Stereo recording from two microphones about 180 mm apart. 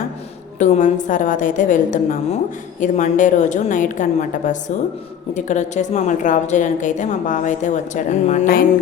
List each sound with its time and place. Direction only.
0.6 s a woman's voice: 45° left (ahead or behind)